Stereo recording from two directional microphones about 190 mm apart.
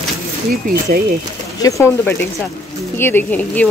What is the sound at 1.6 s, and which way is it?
Speech, 10° left (ahead or behind).